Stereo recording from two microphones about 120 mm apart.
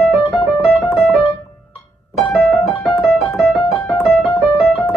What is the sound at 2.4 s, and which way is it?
Piano, centre (ahead or behind).